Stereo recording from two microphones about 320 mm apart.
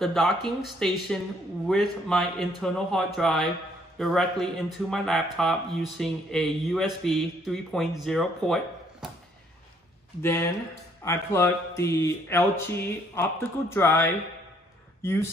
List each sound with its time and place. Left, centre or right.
0.0 s speech: centre
10.2 s speech: centre